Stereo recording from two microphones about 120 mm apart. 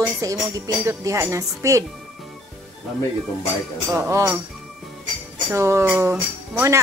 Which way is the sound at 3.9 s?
20° right (ahead or behind).